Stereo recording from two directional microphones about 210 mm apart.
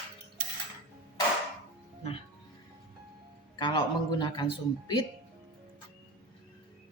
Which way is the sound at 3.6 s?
20° left (ahead or behind).